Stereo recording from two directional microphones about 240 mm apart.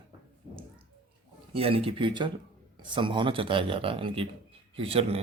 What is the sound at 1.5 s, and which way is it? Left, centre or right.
Speech, right.